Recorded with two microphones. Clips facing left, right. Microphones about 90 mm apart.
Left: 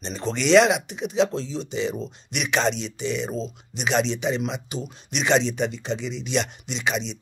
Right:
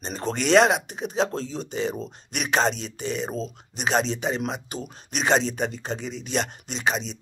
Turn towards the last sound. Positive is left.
turn(degrees=-40)  # may be behind; listen again after turning